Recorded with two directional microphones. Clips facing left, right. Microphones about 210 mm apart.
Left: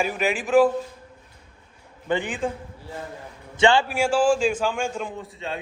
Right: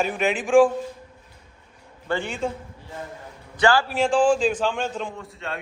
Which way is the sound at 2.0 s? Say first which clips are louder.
Left 2 dB; 15° left (ahead or behind).